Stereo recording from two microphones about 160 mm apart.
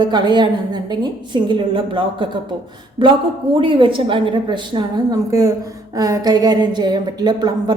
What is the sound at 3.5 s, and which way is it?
A woman's voice, 30° right (ahead or behind).